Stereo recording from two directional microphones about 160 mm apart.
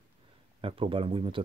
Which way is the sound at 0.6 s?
35° right (ahead or behind).